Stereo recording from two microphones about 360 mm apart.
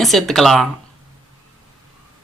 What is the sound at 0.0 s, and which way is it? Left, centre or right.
Speech, centre.